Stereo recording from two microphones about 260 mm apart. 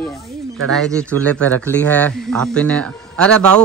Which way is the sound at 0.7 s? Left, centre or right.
Centre.